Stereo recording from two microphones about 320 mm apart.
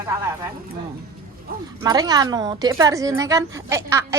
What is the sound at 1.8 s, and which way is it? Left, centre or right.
A woman's voice, centre.